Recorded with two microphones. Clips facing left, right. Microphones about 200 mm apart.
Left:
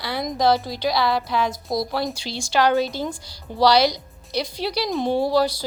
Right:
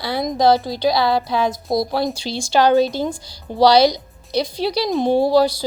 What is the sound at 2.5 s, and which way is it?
A woman's voice, 30° right (ahead or behind).